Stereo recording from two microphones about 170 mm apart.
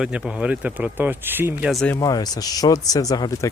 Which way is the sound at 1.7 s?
5° left (ahead or behind).